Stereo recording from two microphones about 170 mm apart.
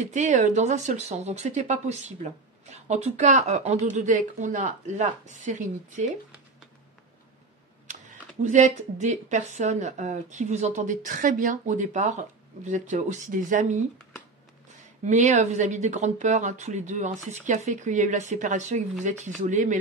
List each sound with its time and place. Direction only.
0.0 s speech: 45° right (ahead or behind)
7.9 s speech: 45° right (ahead or behind)
15.0 s speech: 45° right (ahead or behind)